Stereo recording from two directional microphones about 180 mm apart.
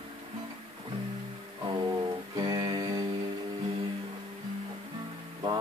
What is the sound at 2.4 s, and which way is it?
Music, 25° right (ahead or behind).